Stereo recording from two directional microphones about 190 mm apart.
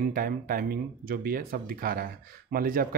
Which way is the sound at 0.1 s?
50° right (ahead or behind).